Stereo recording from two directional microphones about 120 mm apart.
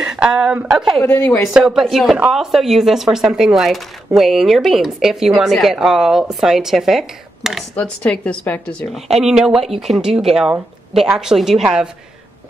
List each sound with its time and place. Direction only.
0.0 s speech: 5° right (ahead or behind)
1.0 s speech: 15° left (ahead or behind)
1.5 s speech: 5° right (ahead or behind)
7.7 s speech: 10° left (ahead or behind)